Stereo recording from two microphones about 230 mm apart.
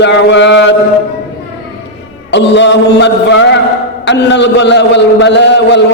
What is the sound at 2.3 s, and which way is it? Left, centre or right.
A man's voice, left.